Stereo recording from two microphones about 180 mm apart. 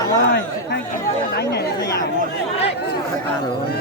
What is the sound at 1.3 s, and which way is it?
Speech, 65° left (ahead or behind).